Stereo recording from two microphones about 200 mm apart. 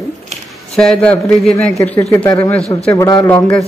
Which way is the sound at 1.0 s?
5° left (ahead or behind).